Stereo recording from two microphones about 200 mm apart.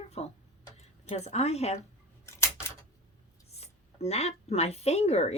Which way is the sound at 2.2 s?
15° left (ahead or behind).